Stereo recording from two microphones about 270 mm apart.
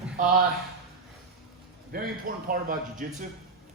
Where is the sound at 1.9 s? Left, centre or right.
Right.